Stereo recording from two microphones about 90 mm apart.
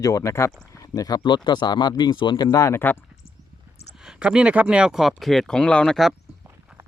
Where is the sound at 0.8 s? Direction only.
45° left (ahead or behind).